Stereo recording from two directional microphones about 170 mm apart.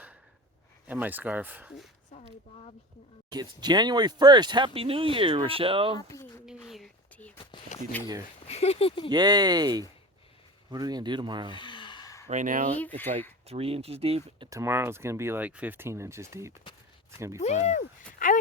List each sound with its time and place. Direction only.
0.9 s speech: 10° right (ahead or behind)
3.3 s speech: 25° right (ahead or behind)
6.0 s speech: 20° left (ahead or behind)
6.7 s whispering: centre (ahead or behind)
7.9 s speech: 10° left (ahead or behind)
8.4 s speech: 40° left (ahead or behind)
9.0 s speech: 25° right (ahead or behind)
11.5 s a sound: 30° left (ahead or behind)
12.3 s speech: 45° right (ahead or behind)
13.5 s speech: 35° right (ahead or behind)
14.6 s speech: 15° right (ahead or behind)
17.4 s speech: 45° left (ahead or behind)
18.2 s a sound: 50° left (ahead or behind)